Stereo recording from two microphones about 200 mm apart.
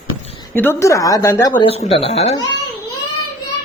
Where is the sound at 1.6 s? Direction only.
30° left (ahead or behind).